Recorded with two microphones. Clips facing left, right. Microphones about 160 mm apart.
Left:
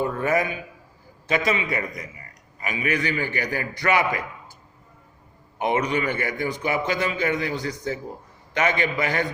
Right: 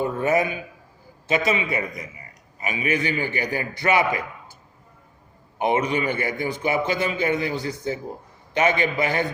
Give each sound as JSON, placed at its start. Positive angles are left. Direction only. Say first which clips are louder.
{"t": 0.0, "sound": "a sound", "louder": "right 2 dB", "side_deg": -25}
{"t": 1.3, "sound": "a man's voice", "louder": "right 1 dB", "side_deg": -25}
{"t": 5.5, "sound": "a man's voice", "louder": "right 1 dB", "side_deg": -25}